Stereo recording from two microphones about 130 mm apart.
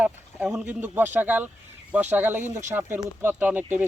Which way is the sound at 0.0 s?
10° right (ahead or behind).